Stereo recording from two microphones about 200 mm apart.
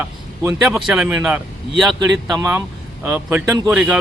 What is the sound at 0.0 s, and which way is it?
A man's voice, 10° right (ahead or behind).